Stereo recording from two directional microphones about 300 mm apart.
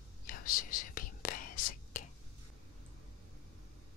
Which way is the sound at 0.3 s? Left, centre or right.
Left.